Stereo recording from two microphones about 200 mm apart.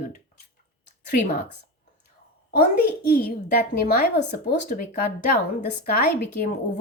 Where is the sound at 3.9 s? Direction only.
50° left (ahead or behind).